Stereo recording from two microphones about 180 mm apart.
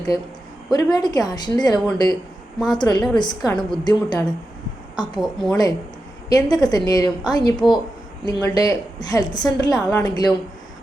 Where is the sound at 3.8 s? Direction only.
20° left (ahead or behind).